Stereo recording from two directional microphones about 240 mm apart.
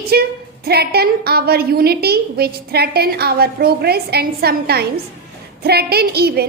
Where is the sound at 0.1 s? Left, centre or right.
Right.